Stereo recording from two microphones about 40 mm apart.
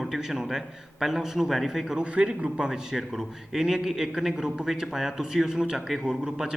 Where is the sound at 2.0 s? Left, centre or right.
Right.